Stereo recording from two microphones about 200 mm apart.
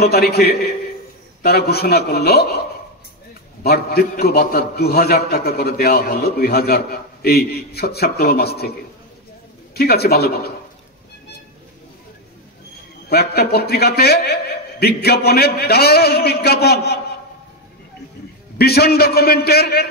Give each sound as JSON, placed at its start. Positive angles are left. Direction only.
{"t": 0.0, "sound": "a man's voice", "side_deg": 50}
{"t": 3.6, "sound": "a man's voice", "side_deg": 50}
{"t": 9.8, "sound": "a man's voice", "side_deg": 50}
{"t": 13.1, "sound": "a man's voice", "side_deg": 50}
{"t": 18.6, "sound": "a man's voice", "side_deg": 50}